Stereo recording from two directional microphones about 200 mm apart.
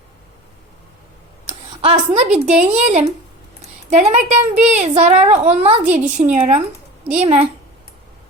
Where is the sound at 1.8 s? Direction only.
30° right (ahead or behind).